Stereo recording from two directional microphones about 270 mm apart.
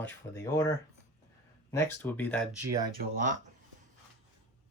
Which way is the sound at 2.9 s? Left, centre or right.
Right.